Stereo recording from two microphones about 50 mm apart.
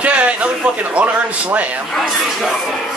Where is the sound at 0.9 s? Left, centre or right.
Right.